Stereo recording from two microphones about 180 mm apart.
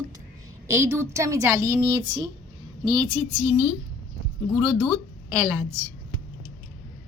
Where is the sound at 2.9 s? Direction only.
20° right (ahead or behind).